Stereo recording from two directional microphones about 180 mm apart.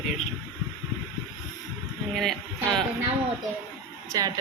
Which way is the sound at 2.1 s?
Centre (ahead or behind).